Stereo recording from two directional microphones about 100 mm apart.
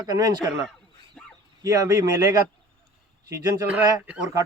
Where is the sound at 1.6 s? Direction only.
35° right (ahead or behind).